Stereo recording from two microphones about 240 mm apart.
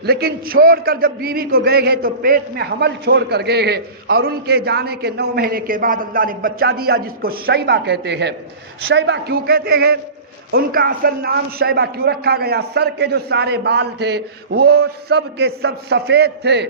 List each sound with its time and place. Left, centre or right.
0.0 s a man's voice: right